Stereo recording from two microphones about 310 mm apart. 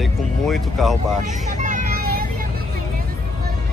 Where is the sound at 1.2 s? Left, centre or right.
Right.